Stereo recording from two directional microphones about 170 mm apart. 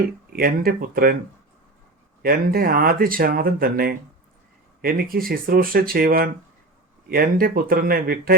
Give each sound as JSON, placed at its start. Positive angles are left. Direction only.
{"t": 0.3, "sound": "speech", "side_deg": -60}
{"t": 2.2, "sound": "speech", "side_deg": -60}